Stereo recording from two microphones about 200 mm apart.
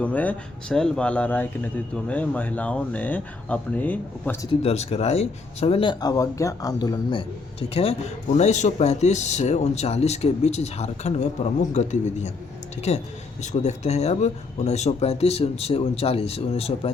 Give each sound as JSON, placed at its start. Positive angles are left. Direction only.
{"t": 0.0, "sound": "speech", "side_deg": 5}
{"t": 4.6, "sound": "speech", "side_deg": 30}